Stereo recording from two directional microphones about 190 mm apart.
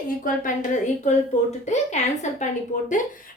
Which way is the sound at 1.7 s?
35° left (ahead or behind).